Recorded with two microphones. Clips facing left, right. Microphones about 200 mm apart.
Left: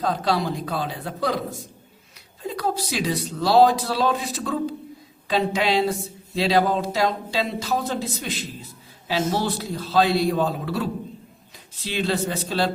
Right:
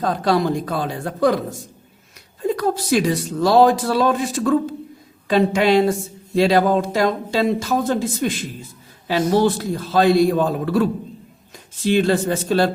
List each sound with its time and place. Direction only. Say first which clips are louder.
0.0 s speech: right 5 dB; 50° right (ahead or behind)
9.4 s speech: right 8 dB; 50° right (ahead or behind)